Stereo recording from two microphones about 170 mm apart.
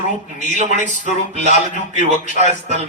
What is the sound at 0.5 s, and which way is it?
A man's voice, 45° right (ahead or behind).